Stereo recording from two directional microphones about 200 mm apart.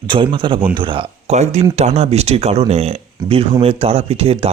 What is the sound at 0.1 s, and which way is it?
Speech, 25° right (ahead or behind).